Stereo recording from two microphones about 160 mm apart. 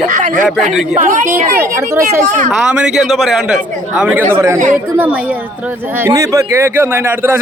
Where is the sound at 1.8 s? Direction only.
15° right (ahead or behind).